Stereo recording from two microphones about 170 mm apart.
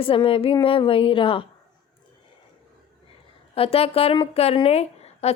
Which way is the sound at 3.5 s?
35° left (ahead or behind).